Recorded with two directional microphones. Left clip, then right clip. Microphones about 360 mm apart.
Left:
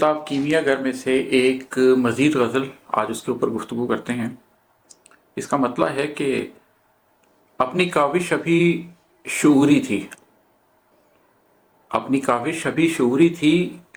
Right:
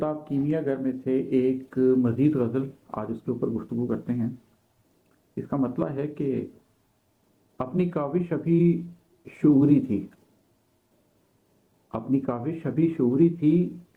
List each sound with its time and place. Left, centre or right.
0.0 s speech: centre
5.3 s speech: centre
7.5 s speech: centre
12.1 s speech: centre